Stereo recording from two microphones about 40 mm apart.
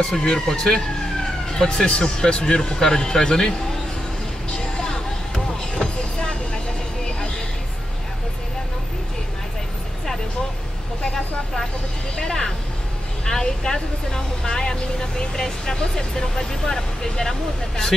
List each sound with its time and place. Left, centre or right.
0.0 s speech: centre
4.5 s a sound: centre
12.2 s speech: centre